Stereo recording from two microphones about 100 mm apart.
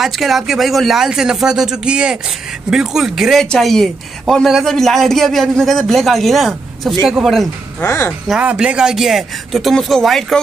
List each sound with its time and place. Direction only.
0.0 s speech: centre (ahead or behind)
7.8 s speech: 30° left (ahead or behind)
8.3 s speech: 10° right (ahead or behind)